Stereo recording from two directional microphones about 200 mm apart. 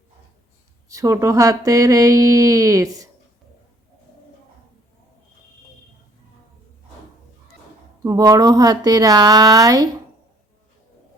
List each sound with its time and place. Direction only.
0.9 s speech: 15° right (ahead or behind)
8.0 s speech: 20° right (ahead or behind)